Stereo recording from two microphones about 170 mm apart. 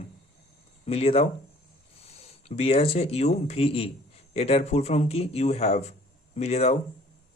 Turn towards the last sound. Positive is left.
turn(degrees=40)  # may be behind; listen again after turning